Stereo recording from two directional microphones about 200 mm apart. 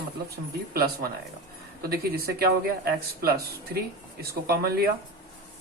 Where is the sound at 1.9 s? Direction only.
50° right (ahead or behind).